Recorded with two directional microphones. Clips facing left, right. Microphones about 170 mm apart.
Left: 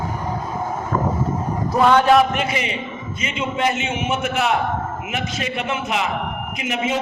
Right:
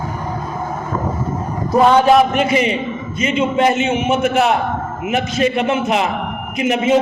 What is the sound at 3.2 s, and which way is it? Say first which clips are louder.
A man's voice: right 7 dB; 40° right (ahead or behind).